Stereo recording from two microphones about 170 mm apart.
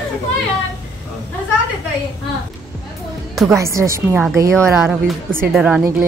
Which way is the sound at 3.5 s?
15° right (ahead or behind).